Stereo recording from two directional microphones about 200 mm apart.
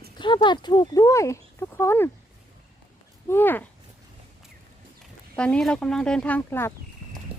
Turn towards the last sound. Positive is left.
turn(degrees=10)  # may be behind; listen again after turning